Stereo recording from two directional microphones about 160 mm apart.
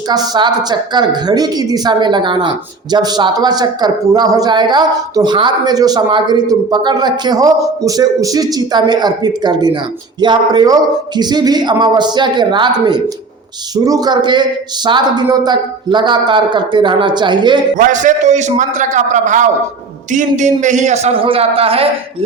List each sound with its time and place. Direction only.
0.1 s speech: 25° right (ahead or behind)
17.7 s a man's voice: 55° right (ahead or behind); by 21.8 s 35° right (ahead or behind)